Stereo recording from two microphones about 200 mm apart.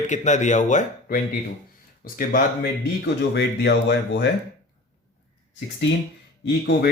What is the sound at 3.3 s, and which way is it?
Speech, 60° left (ahead or behind).